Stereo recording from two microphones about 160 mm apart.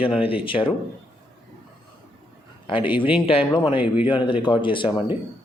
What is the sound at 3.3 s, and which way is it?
Speech, 35° left (ahead or behind).